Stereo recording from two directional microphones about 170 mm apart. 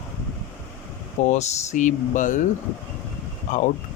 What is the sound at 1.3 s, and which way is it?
A man's voice, 40° left (ahead or behind).